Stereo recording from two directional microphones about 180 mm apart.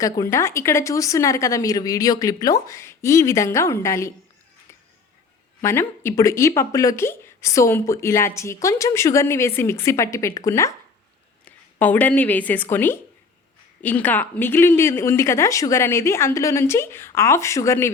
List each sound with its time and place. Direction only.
0.0 s speech: 15° left (ahead or behind)
5.6 s a woman's voice: 15° left (ahead or behind)